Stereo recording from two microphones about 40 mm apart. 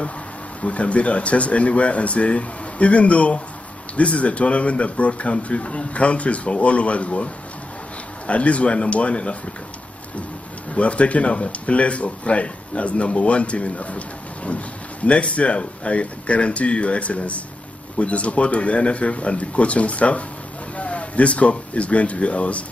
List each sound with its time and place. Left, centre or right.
0.6 s speech: left
8.3 s speech: left
10.7 s speech: left